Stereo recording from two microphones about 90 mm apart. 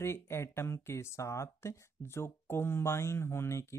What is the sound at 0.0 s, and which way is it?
Speech, 30° left (ahead or behind).